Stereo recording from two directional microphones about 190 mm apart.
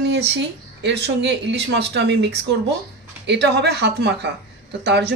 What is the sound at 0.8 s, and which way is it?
Speech, 65° right (ahead or behind).